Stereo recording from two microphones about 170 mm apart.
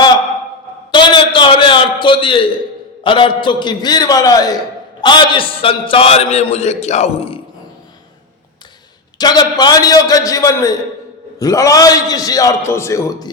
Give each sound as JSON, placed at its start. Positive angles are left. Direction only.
{"t": 0.9, "sound": "a sound", "side_deg": 25}
{"t": 3.0, "sound": "a man's voice", "side_deg": 30}
{"t": 9.1, "sound": "a man's voice", "side_deg": 25}